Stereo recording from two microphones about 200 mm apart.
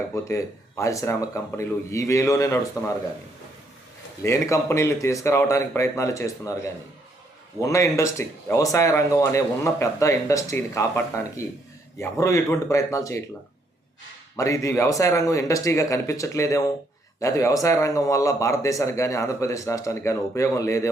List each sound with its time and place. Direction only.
0.1 s speech: 15° left (ahead or behind)
4.2 s speech: 15° left (ahead or behind)
7.6 s speech: 15° left (ahead or behind)
14.3 s speech: 15° left (ahead or behind)